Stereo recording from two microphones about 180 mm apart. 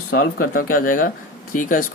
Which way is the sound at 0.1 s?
55° left (ahead or behind).